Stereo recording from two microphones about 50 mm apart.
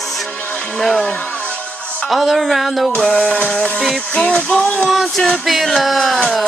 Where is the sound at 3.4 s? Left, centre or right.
Left.